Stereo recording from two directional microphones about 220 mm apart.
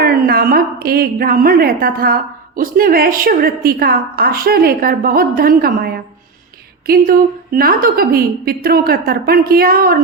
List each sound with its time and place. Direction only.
0.0 s a woman's voice: 45° right (ahead or behind)